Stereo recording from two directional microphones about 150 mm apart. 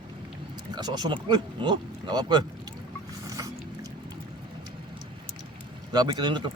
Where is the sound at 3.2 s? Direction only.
20° right (ahead or behind).